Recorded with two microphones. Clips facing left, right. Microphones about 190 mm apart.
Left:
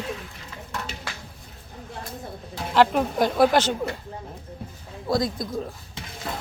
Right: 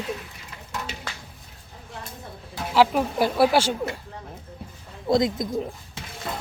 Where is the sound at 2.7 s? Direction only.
5° right (ahead or behind).